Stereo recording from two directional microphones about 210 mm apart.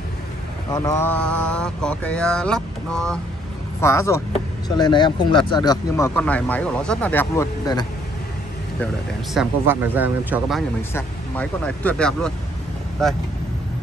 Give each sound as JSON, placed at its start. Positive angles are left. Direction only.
{"t": 0.7, "sound": "mantra", "side_deg": 15}
{"t": 3.8, "sound": "speech", "side_deg": 10}
{"t": 9.3, "sound": "speech", "side_deg": -5}
{"t": 10.9, "sound": "speech", "side_deg": 10}
{"t": 13.0, "sound": "mantra", "side_deg": 0}